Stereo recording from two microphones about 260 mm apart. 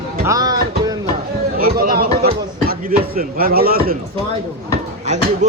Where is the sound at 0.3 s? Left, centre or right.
Centre.